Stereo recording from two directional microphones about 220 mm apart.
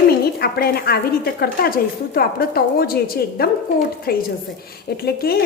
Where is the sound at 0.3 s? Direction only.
45° left (ahead or behind).